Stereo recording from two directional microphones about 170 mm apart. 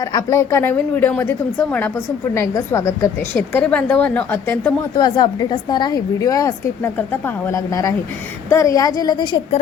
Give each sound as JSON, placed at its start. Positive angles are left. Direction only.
{"t": 0.0, "sound": "a woman's voice", "side_deg": 20}
{"t": 4.9, "sound": "a woman's voice", "side_deg": 25}